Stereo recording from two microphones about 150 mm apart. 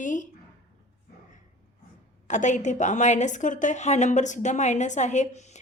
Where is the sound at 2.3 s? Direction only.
55° left (ahead or behind).